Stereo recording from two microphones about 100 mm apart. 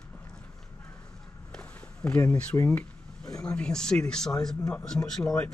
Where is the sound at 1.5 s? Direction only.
10° left (ahead or behind).